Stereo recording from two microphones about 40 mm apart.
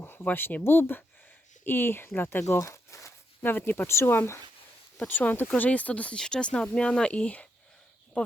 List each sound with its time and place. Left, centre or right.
0.0 s a sound: left
0.6 s speech: left
3.4 s speech: left
3.8 s speech: left
5.0 s speech: left
5.5 s speech: left
6.1 s speech: centre